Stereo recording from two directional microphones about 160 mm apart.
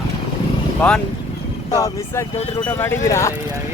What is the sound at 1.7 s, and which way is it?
Speech, 20° left (ahead or behind).